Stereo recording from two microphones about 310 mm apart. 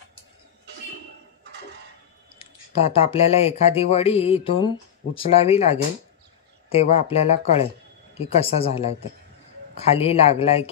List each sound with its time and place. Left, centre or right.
1.4 s dishes: right
2.3 s speech: centre